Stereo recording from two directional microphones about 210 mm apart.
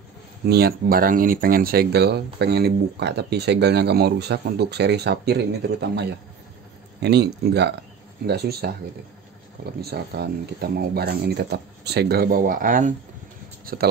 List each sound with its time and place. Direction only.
0.5 s speech: 50° right (ahead or behind)
9.8 s speech: 50° right (ahead or behind)